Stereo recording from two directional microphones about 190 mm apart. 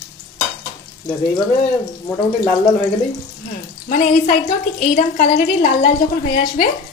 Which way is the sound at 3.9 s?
45° left (ahead or behind).